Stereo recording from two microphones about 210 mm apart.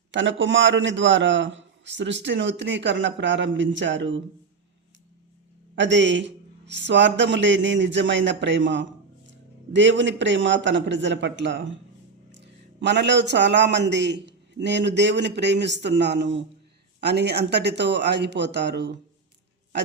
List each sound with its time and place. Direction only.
0.1 s a man's voice: 60° right (ahead or behind)
5.7 s a man's voice: 60° right (ahead or behind)